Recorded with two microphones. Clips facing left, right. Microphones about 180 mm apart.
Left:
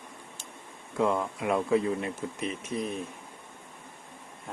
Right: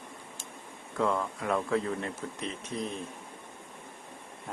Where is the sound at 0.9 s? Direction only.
15° left (ahead or behind).